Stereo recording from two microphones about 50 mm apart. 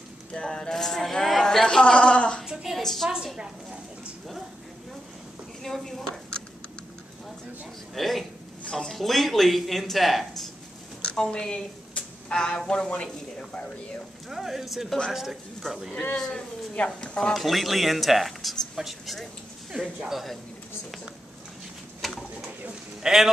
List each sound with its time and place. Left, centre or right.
0.3 s speech: centre
2.4 s a sound: centre
2.8 s a woman's voice: centre
5.6 s speech: centre
7.9 s speech: centre
11.1 s speech: centre
14.3 s speech: centre
16.2 s speech: centre
17.3 s speech: centre
19.7 s speech: centre
22.0 s bird: centre
23.0 s speech: centre